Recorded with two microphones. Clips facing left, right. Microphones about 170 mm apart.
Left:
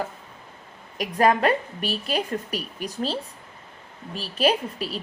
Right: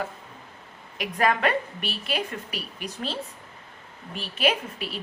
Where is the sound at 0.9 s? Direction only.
35° left (ahead or behind).